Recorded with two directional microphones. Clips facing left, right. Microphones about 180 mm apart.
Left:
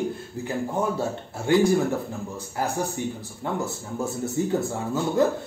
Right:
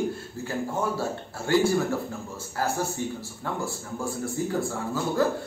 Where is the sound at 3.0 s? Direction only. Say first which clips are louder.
Left 2 dB; 15° left (ahead or behind).